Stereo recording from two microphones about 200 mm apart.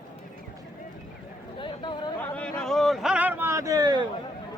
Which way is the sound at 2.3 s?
5° left (ahead or behind).